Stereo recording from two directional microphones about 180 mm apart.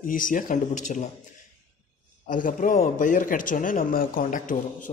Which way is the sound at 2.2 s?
45° left (ahead or behind).